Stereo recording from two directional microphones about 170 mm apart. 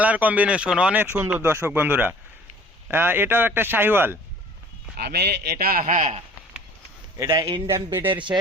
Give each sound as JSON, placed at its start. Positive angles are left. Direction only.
{"t": 0.0, "sound": "speech", "side_deg": -10}
{"t": 4.9, "sound": "a man's voice", "side_deg": -75}
{"t": 7.2, "sound": "a man's voice", "side_deg": -20}